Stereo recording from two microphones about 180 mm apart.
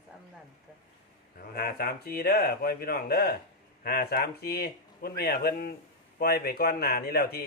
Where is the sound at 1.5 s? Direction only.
60° left (ahead or behind).